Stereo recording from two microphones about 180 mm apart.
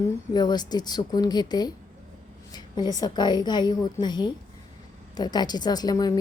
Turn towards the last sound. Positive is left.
turn(degrees=20)  # may be behind; listen again after turning